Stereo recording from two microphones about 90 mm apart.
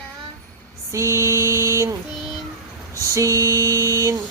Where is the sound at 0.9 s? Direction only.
35° right (ahead or behind).